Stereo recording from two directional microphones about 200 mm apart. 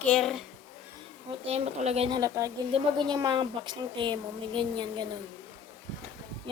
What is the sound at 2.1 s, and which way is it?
Speech, 15° right (ahead or behind).